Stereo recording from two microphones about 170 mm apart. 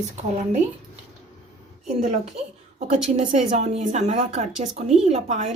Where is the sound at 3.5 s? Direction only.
40° right (ahead or behind).